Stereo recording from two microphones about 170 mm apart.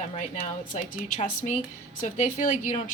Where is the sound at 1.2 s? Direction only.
45° left (ahead or behind).